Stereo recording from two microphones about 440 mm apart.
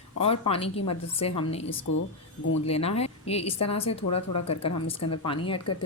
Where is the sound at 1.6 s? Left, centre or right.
Left.